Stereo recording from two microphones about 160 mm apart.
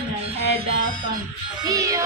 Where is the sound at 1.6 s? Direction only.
20° right (ahead or behind).